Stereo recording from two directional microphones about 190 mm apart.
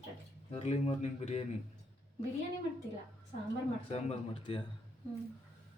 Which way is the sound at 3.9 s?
30° left (ahead or behind).